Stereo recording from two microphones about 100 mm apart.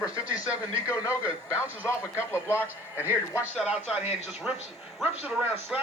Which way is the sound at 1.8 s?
25° left (ahead or behind).